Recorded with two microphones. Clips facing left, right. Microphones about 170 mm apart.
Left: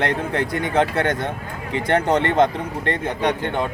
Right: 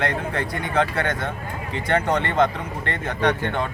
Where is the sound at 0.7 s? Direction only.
20° left (ahead or behind).